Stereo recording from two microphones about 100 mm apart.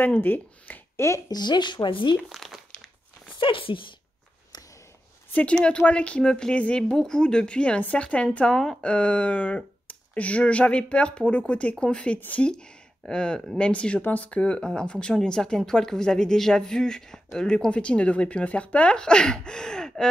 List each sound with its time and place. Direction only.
0.0 s speech: 20° left (ahead or behind)
1.3 s speech: 45° left (ahead or behind)
2.2 s crumpling: centre (ahead or behind)
3.3 s speech: 60° left (ahead or behind)
5.3 s speech: 10° left (ahead or behind)